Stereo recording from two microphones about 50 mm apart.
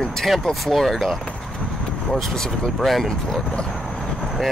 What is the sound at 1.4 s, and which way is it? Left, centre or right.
Clip-clop, centre.